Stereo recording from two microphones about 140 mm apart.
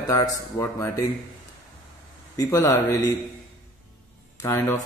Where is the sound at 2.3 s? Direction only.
25° left (ahead or behind).